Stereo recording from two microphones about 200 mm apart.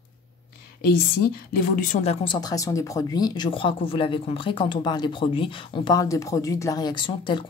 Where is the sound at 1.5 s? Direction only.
45° left (ahead or behind).